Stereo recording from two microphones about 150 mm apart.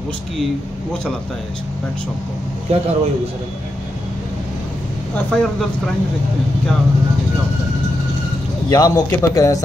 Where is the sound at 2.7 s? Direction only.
45° right (ahead or behind).